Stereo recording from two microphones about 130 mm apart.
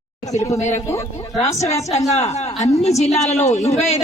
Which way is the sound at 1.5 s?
60° left (ahead or behind).